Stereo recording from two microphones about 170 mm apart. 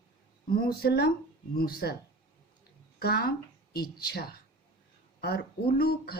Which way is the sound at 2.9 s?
65° left (ahead or behind).